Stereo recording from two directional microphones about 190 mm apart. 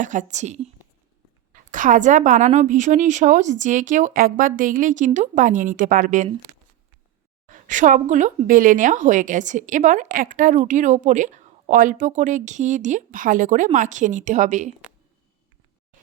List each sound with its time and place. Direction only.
0.0 s a woman's voice: 40° right (ahead or behind)
1.7 s a woman's voice: 40° right (ahead or behind)
6.5 s a sound: 30° right (ahead or behind)
7.4 s a woman's voice: 40° right (ahead or behind)